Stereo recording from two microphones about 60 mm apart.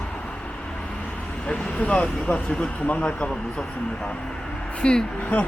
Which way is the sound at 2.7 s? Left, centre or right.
Left.